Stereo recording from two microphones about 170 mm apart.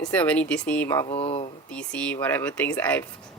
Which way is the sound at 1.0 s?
35° left (ahead or behind).